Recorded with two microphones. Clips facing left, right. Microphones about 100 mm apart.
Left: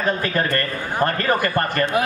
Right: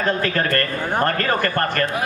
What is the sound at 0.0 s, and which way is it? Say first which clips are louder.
A man's voice: right 1 dB; 15° left (ahead or behind).